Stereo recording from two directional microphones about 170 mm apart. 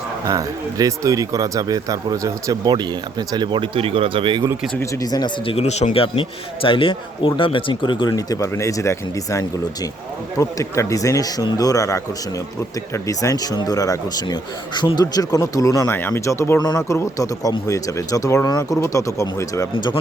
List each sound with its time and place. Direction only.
0.3 s speech: 20° right (ahead or behind)
4.8 s a man's voice: 20° left (ahead or behind)
19.7 s a man's voice: 30° left (ahead or behind)